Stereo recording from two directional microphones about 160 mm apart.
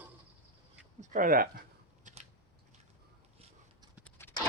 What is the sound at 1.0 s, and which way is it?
Speech, 50° right (ahead or behind).